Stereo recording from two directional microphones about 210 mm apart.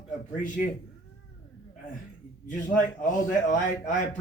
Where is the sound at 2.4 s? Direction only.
35° left (ahead or behind).